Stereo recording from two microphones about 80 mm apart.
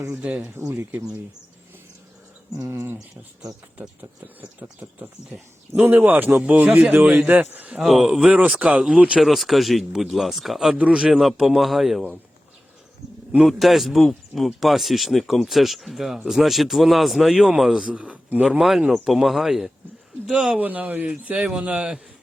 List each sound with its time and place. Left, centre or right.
0.2 s speech: centre
0.7 s speech: right
2.6 s speech: right
3.8 s speech: right
7.8 s speech: centre
9.2 s speech: centre
10.8 s speech: centre
11.1 s speech: centre
13.4 s speech: centre
18.6 s speech: centre
20.6 s speech: centre